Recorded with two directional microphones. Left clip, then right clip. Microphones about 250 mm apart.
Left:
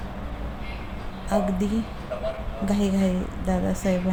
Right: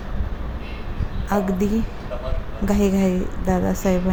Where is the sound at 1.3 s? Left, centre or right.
Centre.